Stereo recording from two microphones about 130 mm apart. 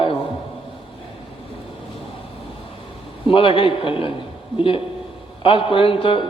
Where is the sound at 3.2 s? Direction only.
45° left (ahead or behind).